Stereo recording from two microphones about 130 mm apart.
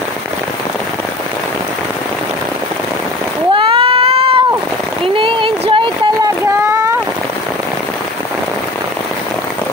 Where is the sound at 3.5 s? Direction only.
40° right (ahead or behind).